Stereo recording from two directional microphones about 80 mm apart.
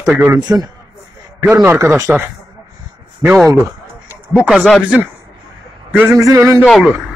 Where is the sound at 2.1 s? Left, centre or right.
Centre.